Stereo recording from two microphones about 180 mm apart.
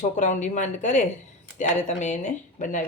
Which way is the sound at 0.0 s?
45° left (ahead or behind).